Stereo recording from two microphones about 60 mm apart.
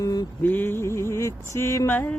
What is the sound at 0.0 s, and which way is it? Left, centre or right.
Mantra, left.